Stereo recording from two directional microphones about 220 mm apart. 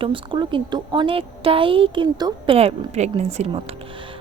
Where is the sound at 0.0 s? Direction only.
20° right (ahead or behind).